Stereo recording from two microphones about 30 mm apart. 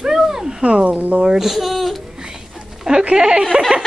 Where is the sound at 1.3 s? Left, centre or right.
Centre.